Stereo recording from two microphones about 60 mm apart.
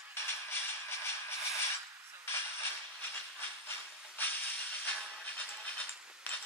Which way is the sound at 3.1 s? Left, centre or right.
Left.